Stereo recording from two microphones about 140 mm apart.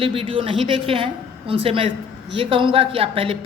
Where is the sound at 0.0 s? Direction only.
40° right (ahead or behind).